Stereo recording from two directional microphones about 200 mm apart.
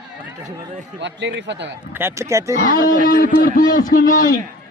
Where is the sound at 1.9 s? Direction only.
15° right (ahead or behind).